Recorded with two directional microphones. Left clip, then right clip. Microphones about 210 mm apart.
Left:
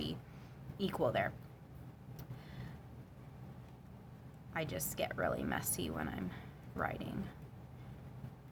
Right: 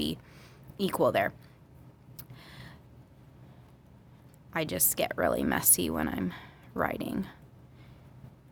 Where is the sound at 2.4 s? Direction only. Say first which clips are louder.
Right 9 dB; 50° right (ahead or behind).